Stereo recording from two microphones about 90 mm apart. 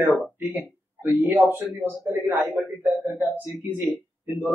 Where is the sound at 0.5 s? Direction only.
20° right (ahead or behind).